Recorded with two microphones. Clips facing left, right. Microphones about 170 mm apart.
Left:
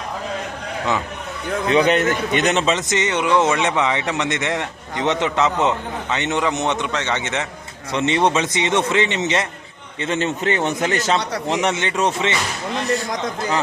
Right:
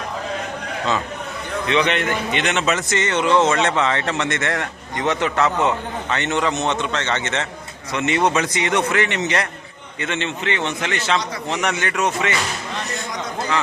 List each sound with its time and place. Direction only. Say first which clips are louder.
1.6 s a man's voice: left 4 dB; 40° left (ahead or behind)
2.7 s speech: even; 20° left (ahead or behind)
7.9 s a man's voice: left 1 dB; 30° left (ahead or behind)
10.0 s a man's voice: left 4 dB; 40° left (ahead or behind)
11.6 s a man's voice: even; 25° left (ahead or behind)